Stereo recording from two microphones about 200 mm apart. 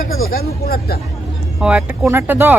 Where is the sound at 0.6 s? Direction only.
50° left (ahead or behind).